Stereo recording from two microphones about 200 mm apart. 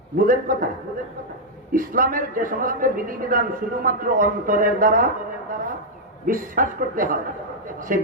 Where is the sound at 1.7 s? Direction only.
45° right (ahead or behind).